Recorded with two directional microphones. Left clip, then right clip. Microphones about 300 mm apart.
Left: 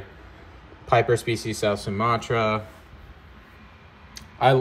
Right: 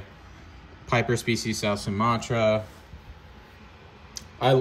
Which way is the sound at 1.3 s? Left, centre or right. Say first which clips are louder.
Left 2 dB; right.